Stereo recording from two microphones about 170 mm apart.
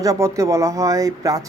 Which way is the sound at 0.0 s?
20° right (ahead or behind).